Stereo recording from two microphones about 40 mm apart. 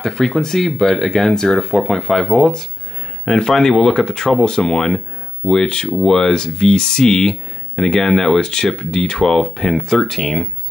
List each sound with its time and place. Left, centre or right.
0.0 s speech: centre